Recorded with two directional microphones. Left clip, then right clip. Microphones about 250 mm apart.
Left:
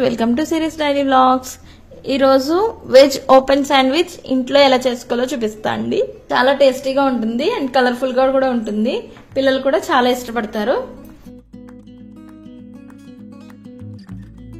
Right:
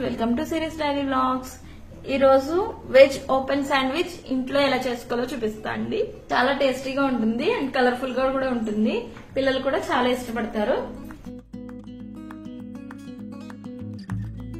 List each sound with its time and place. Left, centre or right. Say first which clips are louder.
0.0 s a woman's voice: left 9 dB; left